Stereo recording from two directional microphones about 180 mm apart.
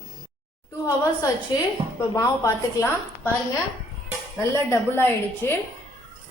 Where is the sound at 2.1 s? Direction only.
15° left (ahead or behind).